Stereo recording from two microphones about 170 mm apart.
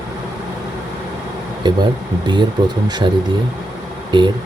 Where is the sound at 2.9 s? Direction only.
25° right (ahead or behind).